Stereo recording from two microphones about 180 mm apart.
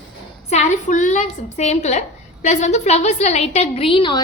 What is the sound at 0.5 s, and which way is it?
A woman's voice, 40° left (ahead or behind).